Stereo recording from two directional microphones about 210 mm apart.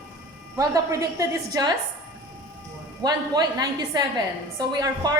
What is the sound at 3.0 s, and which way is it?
A woman's voice, 20° right (ahead or behind).